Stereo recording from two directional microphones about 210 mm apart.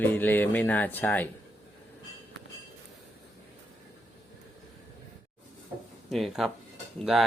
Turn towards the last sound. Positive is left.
turn(degrees=0)  # may be behind; listen again after turning